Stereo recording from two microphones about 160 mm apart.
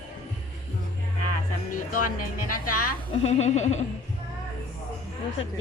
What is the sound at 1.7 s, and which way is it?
Music, 60° left (ahead or behind).